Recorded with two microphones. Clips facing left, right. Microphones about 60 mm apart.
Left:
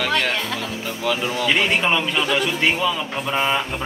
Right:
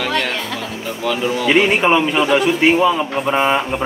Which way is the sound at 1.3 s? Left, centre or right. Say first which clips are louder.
Right 7 dB; centre.